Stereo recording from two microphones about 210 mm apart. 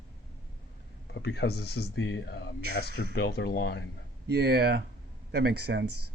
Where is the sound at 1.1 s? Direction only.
55° left (ahead or behind).